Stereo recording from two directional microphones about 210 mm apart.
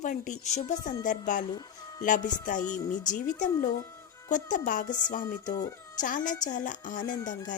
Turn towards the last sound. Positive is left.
turn(degrees=20)  # may be behind; listen again after turning